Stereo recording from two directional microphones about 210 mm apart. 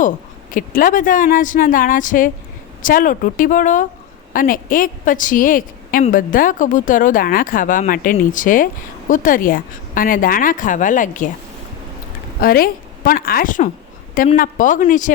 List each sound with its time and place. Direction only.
0.5 s a woman's voice: 40° left (ahead or behind)
12.4 s a woman's voice: 45° left (ahead or behind)